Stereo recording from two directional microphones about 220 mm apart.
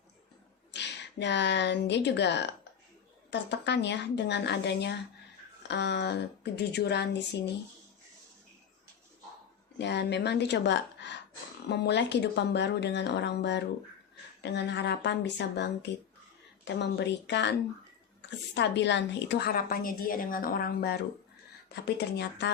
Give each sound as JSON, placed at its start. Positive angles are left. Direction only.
{"t": 0.7, "sound": "a woman's voice", "side_deg": 50}
{"t": 9.7, "sound": "a woman's voice", "side_deg": 50}